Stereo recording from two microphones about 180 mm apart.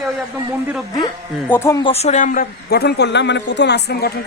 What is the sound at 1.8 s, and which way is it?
A woman's voice, 35° left (ahead or behind).